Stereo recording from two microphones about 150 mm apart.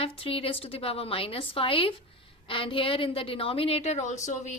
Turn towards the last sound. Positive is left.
turn(degrees=50)  # may be behind; listen again after turning